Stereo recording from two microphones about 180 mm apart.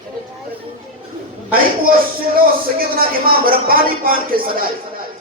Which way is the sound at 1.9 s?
55° right (ahead or behind).